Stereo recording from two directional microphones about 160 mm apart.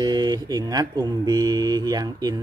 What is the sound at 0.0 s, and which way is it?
Speech, 25° right (ahead or behind).